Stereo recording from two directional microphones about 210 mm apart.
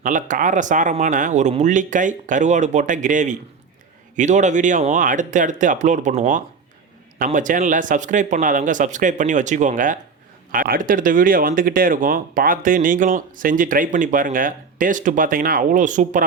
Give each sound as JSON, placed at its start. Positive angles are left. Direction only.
{"t": 0.0, "sound": "speech", "side_deg": -40}